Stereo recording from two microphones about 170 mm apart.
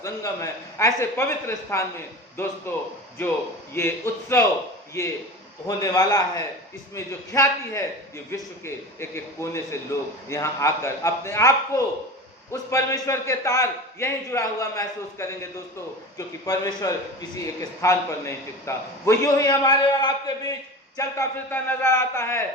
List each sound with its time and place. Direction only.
0.0 s a man's voice: 20° left (ahead or behind)
3.8 s a man's voice: 15° left (ahead or behind)